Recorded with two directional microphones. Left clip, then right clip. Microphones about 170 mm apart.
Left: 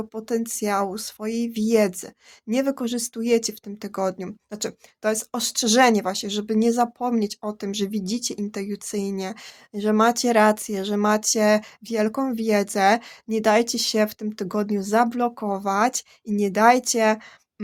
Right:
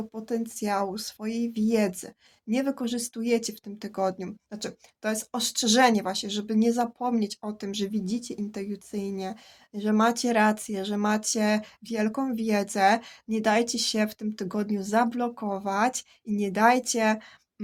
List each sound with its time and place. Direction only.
0.1 s speech: 35° left (ahead or behind)